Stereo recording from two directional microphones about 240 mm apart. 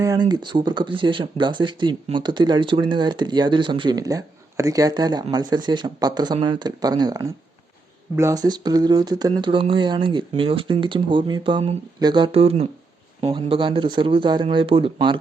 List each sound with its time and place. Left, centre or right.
0.0 s speech: centre